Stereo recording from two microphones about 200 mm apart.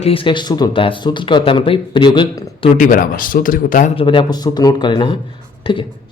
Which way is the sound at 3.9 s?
25° left (ahead or behind).